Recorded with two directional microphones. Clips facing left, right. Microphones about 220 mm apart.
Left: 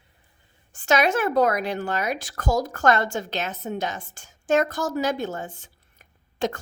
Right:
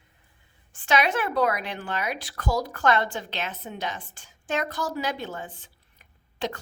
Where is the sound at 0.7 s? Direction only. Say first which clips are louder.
Left 3 dB; 45° left (ahead or behind).